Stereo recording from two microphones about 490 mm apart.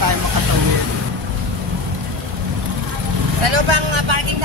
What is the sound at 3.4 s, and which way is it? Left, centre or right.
Vehicle, right.